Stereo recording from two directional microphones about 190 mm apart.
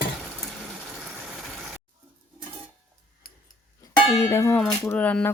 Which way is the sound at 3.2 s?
50° left (ahead or behind).